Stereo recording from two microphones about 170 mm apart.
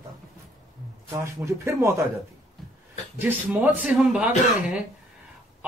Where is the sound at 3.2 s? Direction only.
10° right (ahead or behind).